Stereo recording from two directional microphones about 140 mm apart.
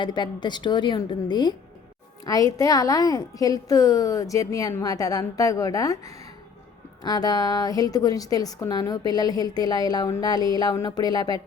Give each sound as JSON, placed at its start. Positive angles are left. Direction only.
{"t": 0.0, "sound": "a woman's voice", "side_deg": 30}